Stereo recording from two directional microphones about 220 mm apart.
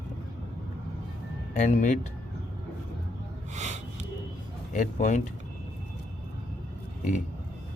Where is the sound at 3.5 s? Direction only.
30° right (ahead or behind).